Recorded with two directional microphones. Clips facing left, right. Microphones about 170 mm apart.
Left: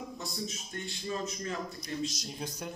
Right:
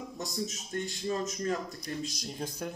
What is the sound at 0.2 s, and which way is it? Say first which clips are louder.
Speech: right 3 dB; 45° right (ahead or behind).